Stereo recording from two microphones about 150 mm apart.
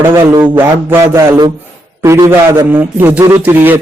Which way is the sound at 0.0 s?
15° right (ahead or behind).